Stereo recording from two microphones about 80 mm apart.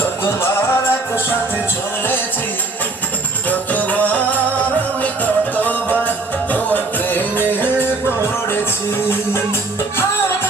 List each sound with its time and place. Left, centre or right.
0.0 s music: left
3.5 s music: left